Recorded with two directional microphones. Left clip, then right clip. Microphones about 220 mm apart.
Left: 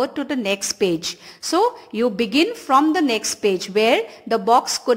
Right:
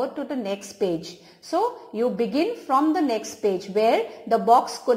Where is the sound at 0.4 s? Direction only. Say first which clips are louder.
Left 9 dB; 30° left (ahead or behind).